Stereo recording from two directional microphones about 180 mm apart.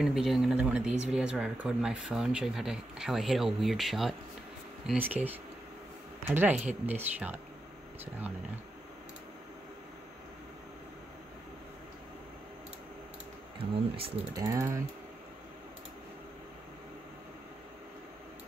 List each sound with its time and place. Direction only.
0.0 s speech: centre (ahead or behind)
13.6 s speech: 30° right (ahead or behind)
14.3 s speech: 15° right (ahead or behind)